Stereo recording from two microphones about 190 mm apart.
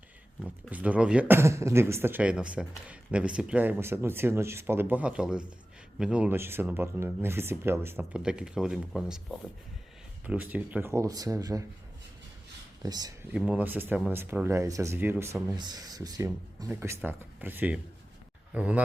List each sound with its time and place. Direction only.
0.4 s speech: 5° right (ahead or behind)
10.2 s speech: 10° right (ahead or behind)
12.8 s speech: 20° right (ahead or behind)
13.3 s speech: 5° right (ahead or behind)